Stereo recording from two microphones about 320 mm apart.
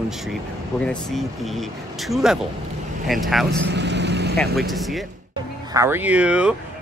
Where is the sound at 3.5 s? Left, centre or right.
Right.